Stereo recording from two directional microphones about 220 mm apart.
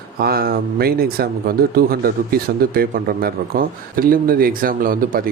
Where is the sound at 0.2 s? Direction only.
45° right (ahead or behind).